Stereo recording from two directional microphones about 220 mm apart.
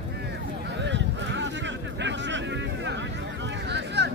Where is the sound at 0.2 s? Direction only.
50° right (ahead or behind).